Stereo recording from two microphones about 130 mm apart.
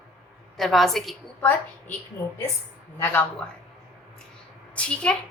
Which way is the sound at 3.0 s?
15° left (ahead or behind).